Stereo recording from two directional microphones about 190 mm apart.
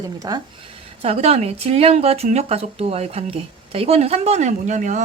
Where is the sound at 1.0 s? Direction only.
35° right (ahead or behind).